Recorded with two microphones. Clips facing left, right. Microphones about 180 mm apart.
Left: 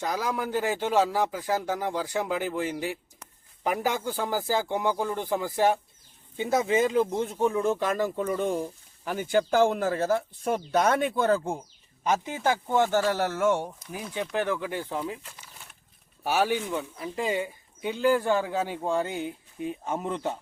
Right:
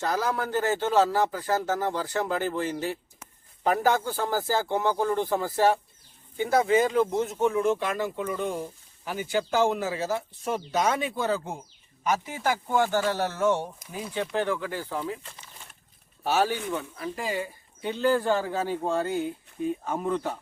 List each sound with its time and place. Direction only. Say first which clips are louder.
0.0 s speech: right 2 dB; 15° left (ahead or behind); by 11.5 s 55° left (ahead or behind)
12.0 s speech: left 1 dB; 20° left (ahead or behind)
16.2 s speech: even; 10° left (ahead or behind)